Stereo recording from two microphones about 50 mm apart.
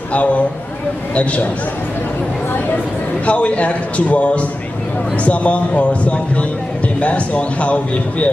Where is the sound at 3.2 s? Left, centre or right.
Left.